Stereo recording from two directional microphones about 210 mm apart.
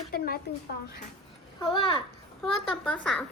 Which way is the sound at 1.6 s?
25° left (ahead or behind).